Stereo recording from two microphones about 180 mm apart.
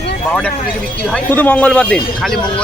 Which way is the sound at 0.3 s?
10° left (ahead or behind).